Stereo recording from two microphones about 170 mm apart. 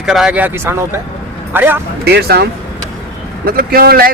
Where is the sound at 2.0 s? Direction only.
70° right (ahead or behind).